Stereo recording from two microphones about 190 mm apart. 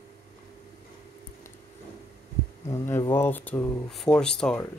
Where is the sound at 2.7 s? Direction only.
15° left (ahead or behind).